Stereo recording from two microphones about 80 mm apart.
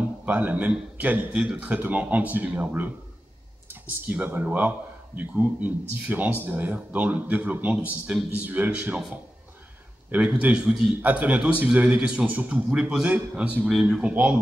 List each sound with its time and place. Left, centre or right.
0.2 s a man's voice: right
4.0 s a man's voice: right